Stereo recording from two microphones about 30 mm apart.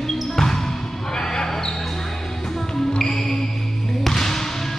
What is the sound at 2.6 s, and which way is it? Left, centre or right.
Music, centre.